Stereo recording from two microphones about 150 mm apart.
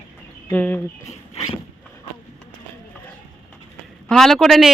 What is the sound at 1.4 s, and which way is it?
Vehicle, 45° left (ahead or behind).